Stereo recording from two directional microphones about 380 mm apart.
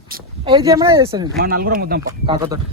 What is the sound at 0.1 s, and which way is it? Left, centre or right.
Speech, centre.